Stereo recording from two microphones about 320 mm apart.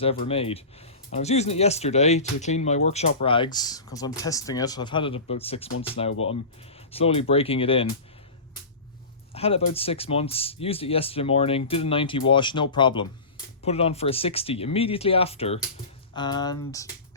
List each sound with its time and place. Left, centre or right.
0.0 s speech: centre
9.3 s speech: centre